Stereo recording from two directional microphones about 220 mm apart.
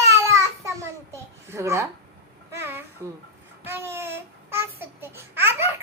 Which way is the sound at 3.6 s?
10° right (ahead or behind).